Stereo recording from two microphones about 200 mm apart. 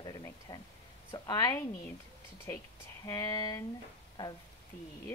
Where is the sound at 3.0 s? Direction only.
15° left (ahead or behind).